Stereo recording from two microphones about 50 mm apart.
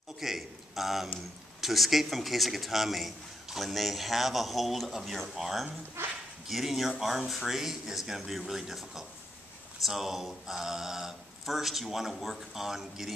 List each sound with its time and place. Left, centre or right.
0.2 s a sound: centre
1.6 s a man's voice: centre
6.0 s dog: right
6.4 s a man's voice: centre